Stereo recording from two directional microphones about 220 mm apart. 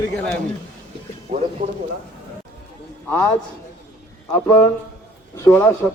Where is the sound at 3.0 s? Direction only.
10° left (ahead or behind).